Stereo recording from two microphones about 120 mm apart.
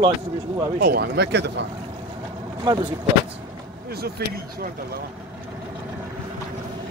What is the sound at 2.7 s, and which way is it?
Speech, 35° right (ahead or behind).